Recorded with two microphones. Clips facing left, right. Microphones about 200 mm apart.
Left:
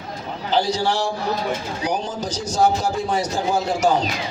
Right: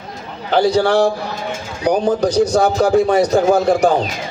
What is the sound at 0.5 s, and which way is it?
A man's voice, 60° right (ahead or behind).